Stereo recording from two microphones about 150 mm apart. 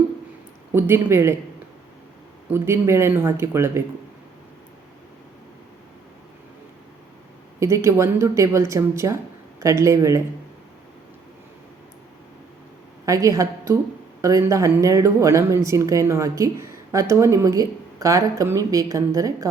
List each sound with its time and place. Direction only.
0.7 s speech: 15° right (ahead or behind)
2.5 s speech: 15° right (ahead or behind)
7.6 s speech: 20° right (ahead or behind)
13.1 s a woman's voice: 20° right (ahead or behind)